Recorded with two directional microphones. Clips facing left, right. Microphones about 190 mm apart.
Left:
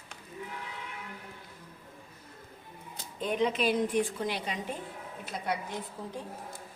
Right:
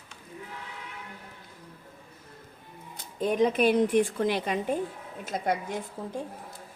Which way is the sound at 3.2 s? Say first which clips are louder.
Right 5 dB; 50° right (ahead or behind).